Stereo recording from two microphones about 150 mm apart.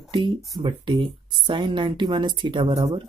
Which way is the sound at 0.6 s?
35° right (ahead or behind).